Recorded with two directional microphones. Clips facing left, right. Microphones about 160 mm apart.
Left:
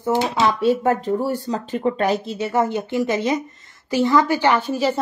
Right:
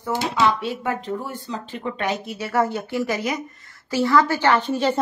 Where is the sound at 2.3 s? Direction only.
20° left (ahead or behind).